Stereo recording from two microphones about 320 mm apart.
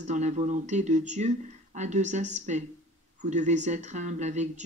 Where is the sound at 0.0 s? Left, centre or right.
Right.